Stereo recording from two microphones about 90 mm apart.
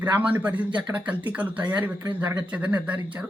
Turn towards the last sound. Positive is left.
turn(degrees=-15)  # may be behind; listen again after turning